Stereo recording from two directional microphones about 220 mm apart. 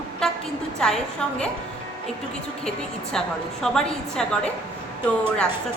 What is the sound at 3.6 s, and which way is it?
Speech, 5° left (ahead or behind).